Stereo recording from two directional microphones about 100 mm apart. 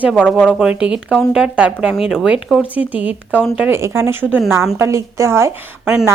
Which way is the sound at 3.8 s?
25° right (ahead or behind).